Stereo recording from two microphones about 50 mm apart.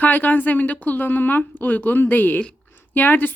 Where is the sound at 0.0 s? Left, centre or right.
Left.